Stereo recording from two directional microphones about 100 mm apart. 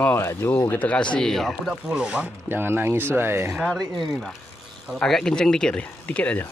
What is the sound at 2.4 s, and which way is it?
Speech, 20° right (ahead or behind).